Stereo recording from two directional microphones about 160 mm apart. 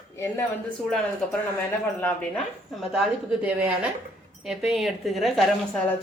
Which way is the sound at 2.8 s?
5° right (ahead or behind).